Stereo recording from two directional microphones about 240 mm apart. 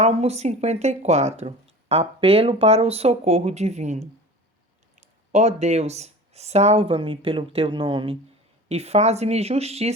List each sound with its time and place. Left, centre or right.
0.0 s speech: right